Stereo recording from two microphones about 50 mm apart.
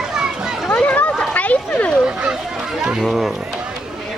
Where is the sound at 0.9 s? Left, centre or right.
Left.